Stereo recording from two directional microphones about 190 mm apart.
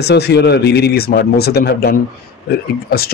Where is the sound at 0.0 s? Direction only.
60° left (ahead or behind).